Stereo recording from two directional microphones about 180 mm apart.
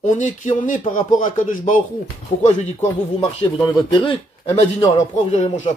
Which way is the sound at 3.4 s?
25° left (ahead or behind).